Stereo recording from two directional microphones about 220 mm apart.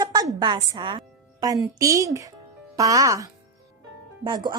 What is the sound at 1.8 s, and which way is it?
Speech, 15° right (ahead or behind).